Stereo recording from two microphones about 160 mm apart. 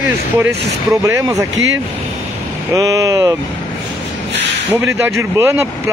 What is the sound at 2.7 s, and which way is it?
Speech, 20° right (ahead or behind).